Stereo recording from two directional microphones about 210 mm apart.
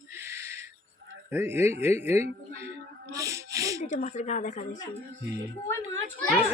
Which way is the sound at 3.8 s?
35° left (ahead or behind).